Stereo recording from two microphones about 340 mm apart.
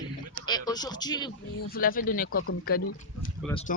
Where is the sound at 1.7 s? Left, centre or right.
Left.